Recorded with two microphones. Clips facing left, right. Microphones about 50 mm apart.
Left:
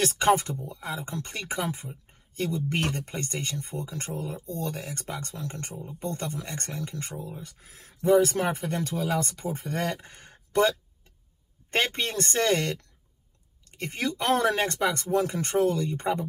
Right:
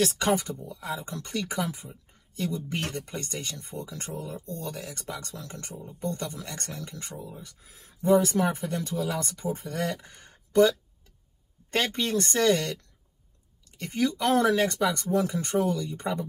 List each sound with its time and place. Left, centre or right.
0.0 s speech: left
7.4 s speech: left